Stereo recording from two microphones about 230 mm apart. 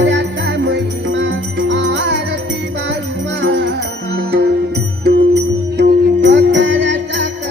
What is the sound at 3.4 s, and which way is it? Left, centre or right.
Music, right.